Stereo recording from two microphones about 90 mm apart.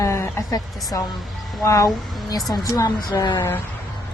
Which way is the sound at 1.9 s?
Centre (ahead or behind).